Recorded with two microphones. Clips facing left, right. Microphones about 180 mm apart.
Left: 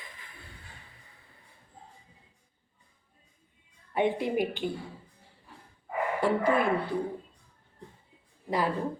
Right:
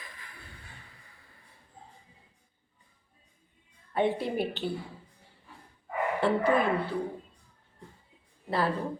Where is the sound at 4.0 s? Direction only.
15° left (ahead or behind).